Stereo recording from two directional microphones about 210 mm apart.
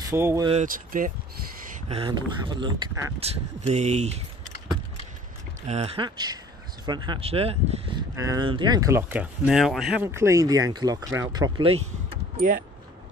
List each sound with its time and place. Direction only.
0.0 s speech: 10° right (ahead or behind)
0.5 s speech: 35° right (ahead or behind)
1.9 s speech: 25° right (ahead or behind)
5.7 s speech: 30° right (ahead or behind)
8.2 s speech: 20° right (ahead or behind); by 10.0 s centre (ahead or behind)
10.0 s speech: 15° right (ahead or behind)
12.4 s speech: 40° right (ahead or behind)